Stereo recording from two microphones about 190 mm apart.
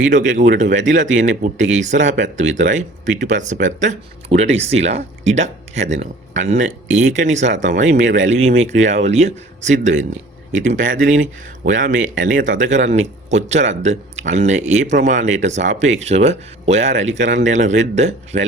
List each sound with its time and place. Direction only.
0.1 s a man's voice: 40° right (ahead or behind)